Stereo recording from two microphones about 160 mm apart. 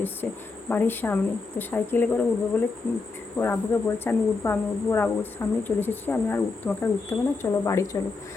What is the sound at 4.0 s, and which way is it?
A woman's voice, 15° left (ahead or behind).